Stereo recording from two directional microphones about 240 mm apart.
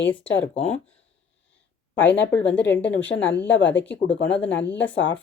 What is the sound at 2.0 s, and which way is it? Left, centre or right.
Speech, centre.